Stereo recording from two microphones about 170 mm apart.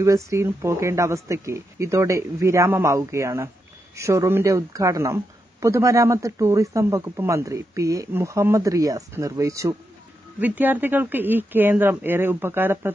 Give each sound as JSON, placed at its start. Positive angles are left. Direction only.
{"t": 0.0, "sound": "speech", "side_deg": -15}